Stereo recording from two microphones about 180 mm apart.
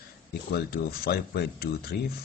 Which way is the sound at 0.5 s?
55° left (ahead or behind).